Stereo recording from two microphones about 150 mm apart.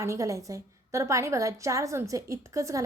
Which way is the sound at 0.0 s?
20° right (ahead or behind).